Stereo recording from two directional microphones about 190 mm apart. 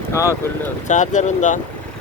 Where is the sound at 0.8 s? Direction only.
40° left (ahead or behind).